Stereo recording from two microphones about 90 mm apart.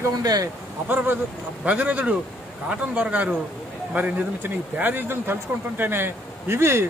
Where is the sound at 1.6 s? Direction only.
15° right (ahead or behind).